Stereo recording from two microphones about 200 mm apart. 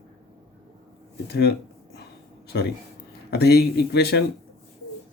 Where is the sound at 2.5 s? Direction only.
55° left (ahead or behind).